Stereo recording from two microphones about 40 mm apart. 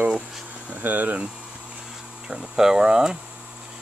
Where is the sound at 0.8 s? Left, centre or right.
Right.